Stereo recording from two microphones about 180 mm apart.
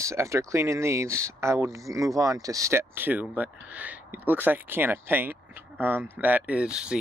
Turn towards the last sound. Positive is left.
turn(degrees=-5)  # may be behind; listen again after turning